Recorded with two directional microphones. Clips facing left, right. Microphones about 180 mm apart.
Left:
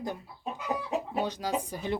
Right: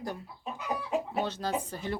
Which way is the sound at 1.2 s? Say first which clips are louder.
Left 1 dB; 15° left (ahead or behind).